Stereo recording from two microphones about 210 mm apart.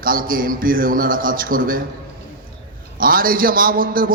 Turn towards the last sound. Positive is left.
turn(degrees=-40)  # may be behind; listen again after turning